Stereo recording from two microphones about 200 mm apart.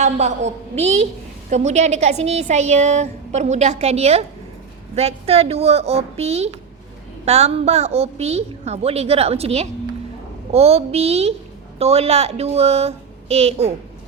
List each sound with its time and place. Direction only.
0.0 s a woman's voice: 35° right (ahead or behind)